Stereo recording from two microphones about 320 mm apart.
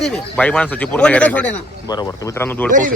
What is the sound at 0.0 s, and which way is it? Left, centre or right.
A man's voice, centre.